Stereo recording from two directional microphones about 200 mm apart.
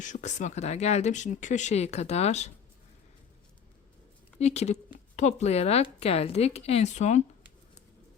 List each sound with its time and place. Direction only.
0.0 s speech: 35° left (ahead or behind)
4.4 s speech: 35° left (ahead or behind)